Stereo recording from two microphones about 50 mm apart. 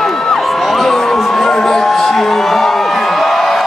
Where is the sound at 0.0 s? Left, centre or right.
Centre.